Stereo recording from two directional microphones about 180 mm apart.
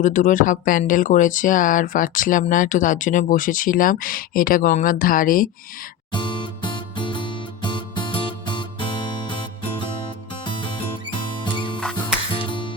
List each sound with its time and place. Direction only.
0.0 s speech: 45° left (ahead or behind)
6.1 s music: 25° left (ahead or behind)